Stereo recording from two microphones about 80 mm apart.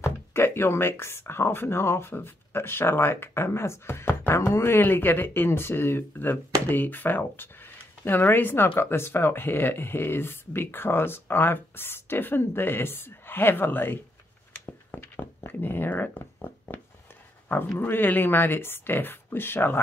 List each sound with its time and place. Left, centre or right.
0.0 s speech: left
15.1 s speech: left